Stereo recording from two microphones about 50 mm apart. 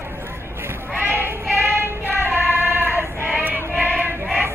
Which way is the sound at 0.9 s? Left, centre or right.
Right.